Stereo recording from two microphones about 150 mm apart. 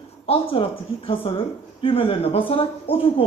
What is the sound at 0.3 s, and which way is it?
A woman's voice, 40° left (ahead or behind).